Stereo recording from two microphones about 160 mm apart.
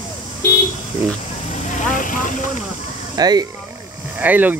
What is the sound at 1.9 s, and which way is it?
Vehicle, 55° left (ahead or behind).